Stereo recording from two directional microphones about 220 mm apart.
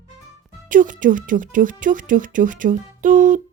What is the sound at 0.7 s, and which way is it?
Speech, 35° right (ahead or behind).